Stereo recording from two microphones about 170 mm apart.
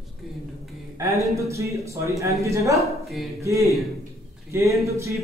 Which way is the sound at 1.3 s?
15° right (ahead or behind).